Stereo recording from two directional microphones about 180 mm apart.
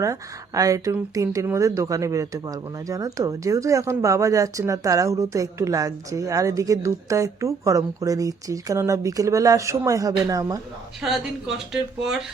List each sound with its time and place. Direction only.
0.0 s speech: 20° right (ahead or behind)
11.0 s speech: centre (ahead or behind)